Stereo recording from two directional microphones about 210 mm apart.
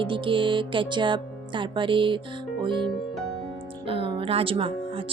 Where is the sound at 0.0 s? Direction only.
25° right (ahead or behind).